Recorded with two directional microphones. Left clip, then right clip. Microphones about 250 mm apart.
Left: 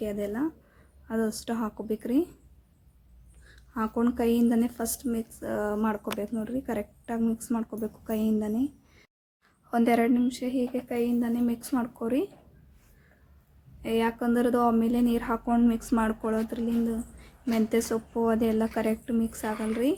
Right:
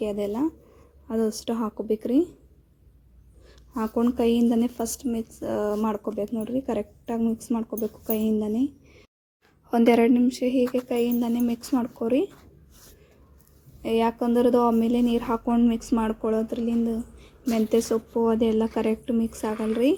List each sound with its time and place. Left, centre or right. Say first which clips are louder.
0.0 s a woman's voice: right 4 dB; centre
3.5 s a woman's voice: right 3 dB; centre
9.6 s a woman's voice: right 5 dB; centre
13.8 s a woman's voice: right 4 dB; centre